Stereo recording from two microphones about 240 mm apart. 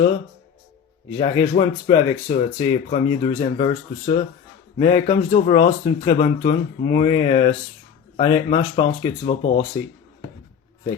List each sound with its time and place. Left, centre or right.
1.2 s speech: centre